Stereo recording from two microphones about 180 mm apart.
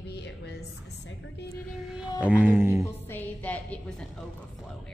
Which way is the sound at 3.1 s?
10° left (ahead or behind).